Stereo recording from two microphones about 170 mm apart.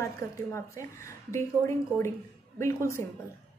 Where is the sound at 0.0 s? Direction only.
15° left (ahead or behind).